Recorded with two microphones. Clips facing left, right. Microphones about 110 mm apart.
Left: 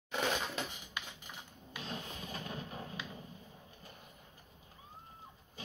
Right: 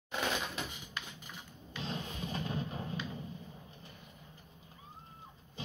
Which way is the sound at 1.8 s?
25° right (ahead or behind).